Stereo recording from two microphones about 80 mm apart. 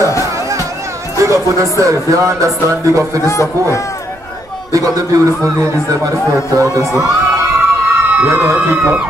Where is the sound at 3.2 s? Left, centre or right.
Left.